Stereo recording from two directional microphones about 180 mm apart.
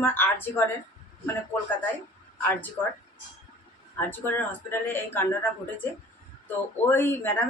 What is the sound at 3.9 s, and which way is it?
A woman's voice, 10° left (ahead or behind).